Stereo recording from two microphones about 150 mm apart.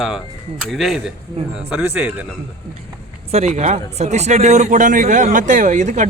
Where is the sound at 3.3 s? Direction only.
45° right (ahead or behind).